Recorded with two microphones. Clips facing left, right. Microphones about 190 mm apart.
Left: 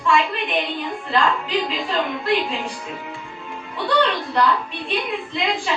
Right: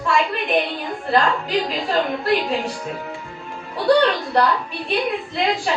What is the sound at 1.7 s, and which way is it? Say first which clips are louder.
Speech: right 2 dB; 40° right (ahead or behind).